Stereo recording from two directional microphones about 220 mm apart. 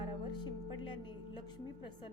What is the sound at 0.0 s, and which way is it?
A woman's voice, 20° left (ahead or behind).